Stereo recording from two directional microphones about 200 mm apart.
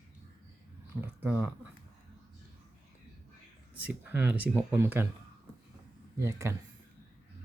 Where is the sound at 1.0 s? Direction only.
5° right (ahead or behind).